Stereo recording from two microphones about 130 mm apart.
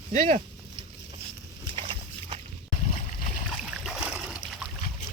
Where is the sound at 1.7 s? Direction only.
45° right (ahead or behind).